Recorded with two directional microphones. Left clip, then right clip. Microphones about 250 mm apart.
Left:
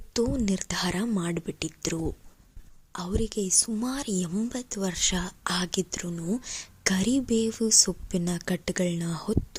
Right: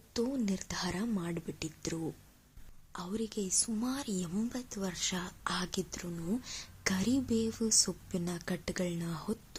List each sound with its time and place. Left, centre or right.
0.1 s a woman's voice: left